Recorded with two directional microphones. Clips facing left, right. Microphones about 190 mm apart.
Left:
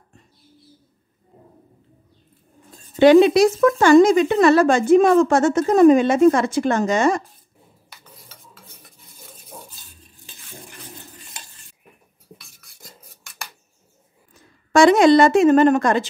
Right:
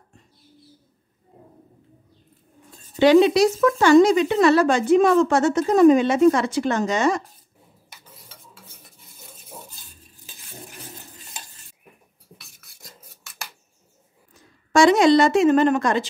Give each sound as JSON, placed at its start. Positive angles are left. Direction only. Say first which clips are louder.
{"t": 3.0, "sound": "speech", "louder": "left 3 dB", "side_deg": 55}
{"t": 12.4, "sound": "filing", "louder": "left 2 dB", "side_deg": 0}
{"t": 14.7, "sound": "speech", "louder": "left 2 dB", "side_deg": 55}